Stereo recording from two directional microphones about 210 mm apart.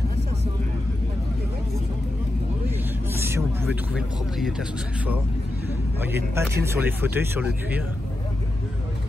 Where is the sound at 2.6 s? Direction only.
10° right (ahead or behind).